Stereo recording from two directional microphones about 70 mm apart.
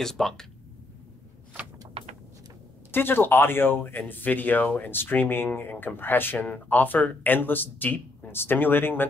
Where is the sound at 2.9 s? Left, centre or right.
Left.